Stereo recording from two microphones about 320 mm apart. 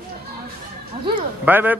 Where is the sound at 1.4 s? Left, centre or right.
Centre.